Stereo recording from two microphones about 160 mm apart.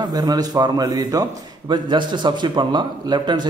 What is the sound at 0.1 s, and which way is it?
A man's voice, 25° right (ahead or behind).